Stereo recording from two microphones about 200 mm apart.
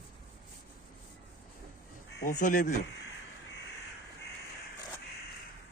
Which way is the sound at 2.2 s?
40° left (ahead or behind).